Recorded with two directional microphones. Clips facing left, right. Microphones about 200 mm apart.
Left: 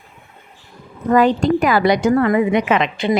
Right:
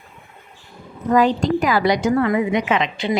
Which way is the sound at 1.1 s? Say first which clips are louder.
Left 2 dB; 60° left (ahead or behind).